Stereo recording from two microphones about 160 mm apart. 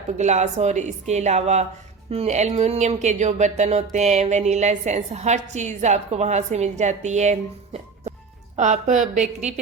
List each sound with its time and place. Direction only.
0.2 s speech: 45° right (ahead or behind)